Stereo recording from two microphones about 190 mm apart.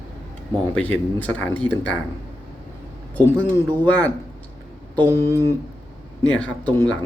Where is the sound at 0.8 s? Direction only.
10° left (ahead or behind).